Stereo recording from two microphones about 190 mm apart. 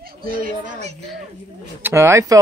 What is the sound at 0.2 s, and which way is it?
Speech, 50° right (ahead or behind).